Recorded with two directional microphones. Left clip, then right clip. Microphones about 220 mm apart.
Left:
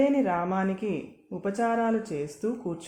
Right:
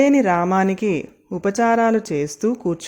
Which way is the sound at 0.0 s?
45° right (ahead or behind).